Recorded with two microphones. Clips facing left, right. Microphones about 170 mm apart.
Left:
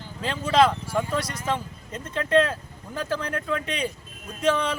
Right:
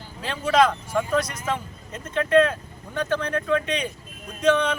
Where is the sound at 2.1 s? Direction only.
30° left (ahead or behind).